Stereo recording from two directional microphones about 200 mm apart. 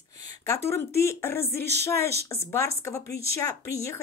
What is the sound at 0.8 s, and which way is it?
A woman's voice, 10° left (ahead or behind).